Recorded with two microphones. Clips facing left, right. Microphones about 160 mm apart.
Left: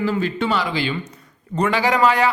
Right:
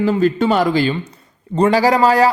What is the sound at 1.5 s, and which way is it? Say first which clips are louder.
Speech: right 6 dB; 35° right (ahead or behind).